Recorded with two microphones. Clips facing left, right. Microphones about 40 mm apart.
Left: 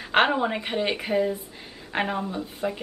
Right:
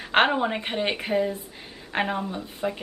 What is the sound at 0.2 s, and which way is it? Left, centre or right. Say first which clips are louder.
A woman's voice: even; centre.